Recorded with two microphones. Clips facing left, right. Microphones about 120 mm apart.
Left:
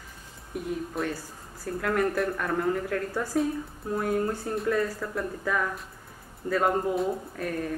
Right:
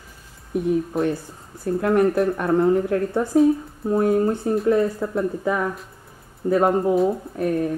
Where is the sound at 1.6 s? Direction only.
25° right (ahead or behind).